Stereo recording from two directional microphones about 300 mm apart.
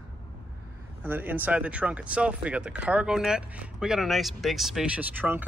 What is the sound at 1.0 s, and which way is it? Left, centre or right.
Speech, centre.